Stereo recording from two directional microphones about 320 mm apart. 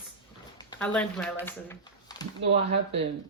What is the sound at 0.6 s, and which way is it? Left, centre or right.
Speech, centre.